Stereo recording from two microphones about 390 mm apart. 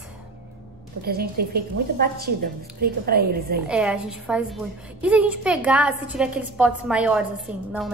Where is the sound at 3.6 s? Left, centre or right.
Centre.